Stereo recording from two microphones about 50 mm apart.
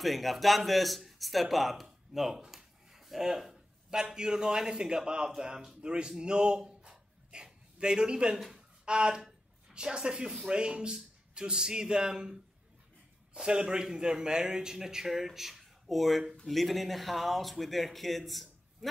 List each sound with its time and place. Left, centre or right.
0.0 s a man's voice: centre
13.3 s speech: centre